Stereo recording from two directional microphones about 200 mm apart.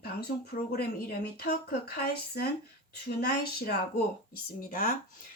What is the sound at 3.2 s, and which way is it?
Speech, 50° left (ahead or behind).